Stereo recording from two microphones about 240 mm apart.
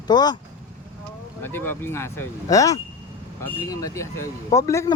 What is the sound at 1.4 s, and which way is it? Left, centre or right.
A man's voice, centre.